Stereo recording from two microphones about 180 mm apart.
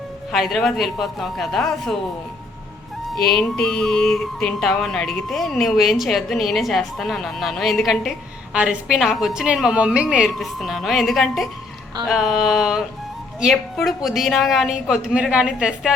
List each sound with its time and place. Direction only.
0.3 s music: centre (ahead or behind)
3.2 s music: 5° left (ahead or behind)